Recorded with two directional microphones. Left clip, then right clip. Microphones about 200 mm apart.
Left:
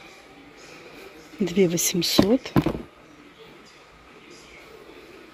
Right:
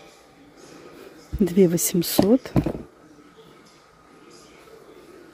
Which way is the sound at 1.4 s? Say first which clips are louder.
Right 2 dB; 25° right (ahead or behind).